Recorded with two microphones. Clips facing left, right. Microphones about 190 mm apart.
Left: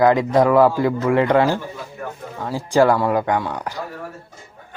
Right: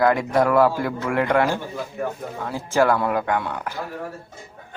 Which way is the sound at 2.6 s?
15° left (ahead or behind).